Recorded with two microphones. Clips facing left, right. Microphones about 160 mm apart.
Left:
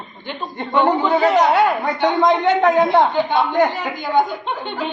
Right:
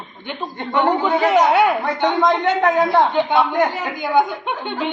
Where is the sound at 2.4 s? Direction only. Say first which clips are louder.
Left 2 dB; 20° left (ahead or behind).